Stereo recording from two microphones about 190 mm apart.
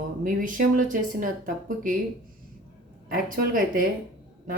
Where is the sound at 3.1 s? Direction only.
50° right (ahead or behind).